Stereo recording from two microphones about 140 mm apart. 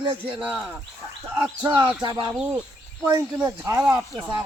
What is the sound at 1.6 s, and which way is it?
Speech, 35° right (ahead or behind).